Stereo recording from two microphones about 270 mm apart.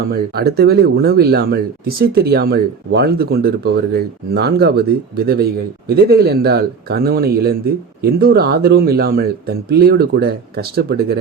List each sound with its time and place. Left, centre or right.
0.1 s speech: right